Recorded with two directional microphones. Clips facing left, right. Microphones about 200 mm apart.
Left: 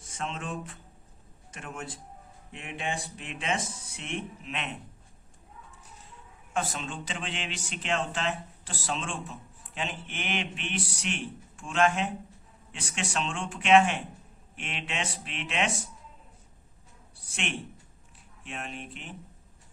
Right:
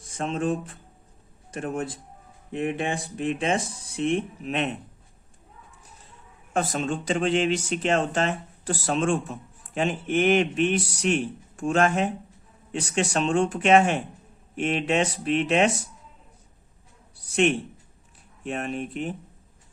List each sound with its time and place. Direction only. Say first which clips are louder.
0.0 s speech: right 10 dB; 35° right (ahead or behind)
6.5 s speech: right 7 dB; 45° right (ahead or behind)
18.4 s speech: right 10 dB; 45° right (ahead or behind)